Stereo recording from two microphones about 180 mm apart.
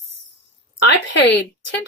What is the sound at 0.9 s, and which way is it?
Speech, 75° left (ahead or behind).